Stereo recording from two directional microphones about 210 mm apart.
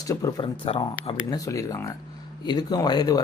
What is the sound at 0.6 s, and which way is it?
Speech, 25° left (ahead or behind).